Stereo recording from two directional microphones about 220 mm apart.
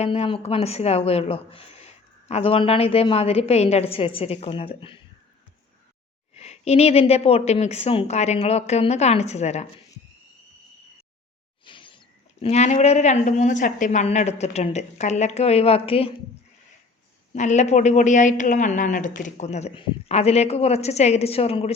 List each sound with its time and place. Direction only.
0.0 s speech: 30° left (ahead or behind)
6.3 s speech: 30° left (ahead or behind)
11.6 s speech: 20° left (ahead or behind)
17.3 s a woman's voice: 30° left (ahead or behind)